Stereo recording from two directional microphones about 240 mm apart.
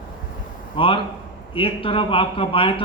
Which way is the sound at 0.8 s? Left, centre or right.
Left.